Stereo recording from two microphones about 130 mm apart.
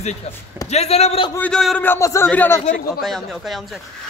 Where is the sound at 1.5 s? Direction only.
Centre (ahead or behind).